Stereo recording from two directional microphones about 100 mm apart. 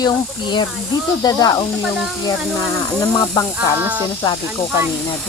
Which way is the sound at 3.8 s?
15° right (ahead or behind).